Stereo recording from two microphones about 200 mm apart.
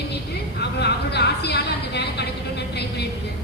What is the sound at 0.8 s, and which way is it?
Speech, 55° left (ahead or behind).